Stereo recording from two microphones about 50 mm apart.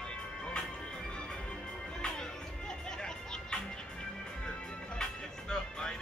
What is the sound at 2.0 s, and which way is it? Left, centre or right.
Music, centre.